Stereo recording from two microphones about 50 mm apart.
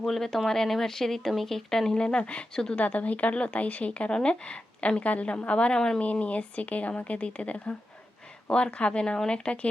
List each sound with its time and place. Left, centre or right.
0.0 s speech: centre
6.0 s speech: left